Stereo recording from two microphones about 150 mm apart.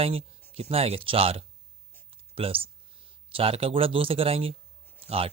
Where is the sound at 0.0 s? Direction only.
40° right (ahead or behind).